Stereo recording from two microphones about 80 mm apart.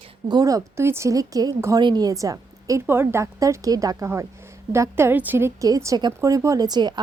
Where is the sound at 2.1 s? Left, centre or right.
Right.